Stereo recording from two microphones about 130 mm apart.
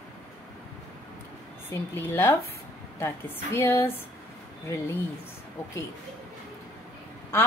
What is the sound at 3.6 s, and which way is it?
Speech, 15° left (ahead or behind).